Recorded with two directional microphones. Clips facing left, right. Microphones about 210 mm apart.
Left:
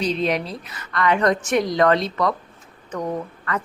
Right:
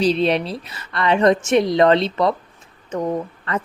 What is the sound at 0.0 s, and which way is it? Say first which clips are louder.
Speech: right 4 dB; 30° right (ahead or behind).